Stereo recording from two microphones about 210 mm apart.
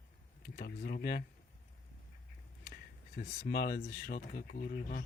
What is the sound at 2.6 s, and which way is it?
Speech, 45° left (ahead or behind).